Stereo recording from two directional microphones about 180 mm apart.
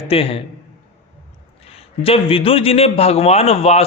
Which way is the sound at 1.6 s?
30° left (ahead or behind).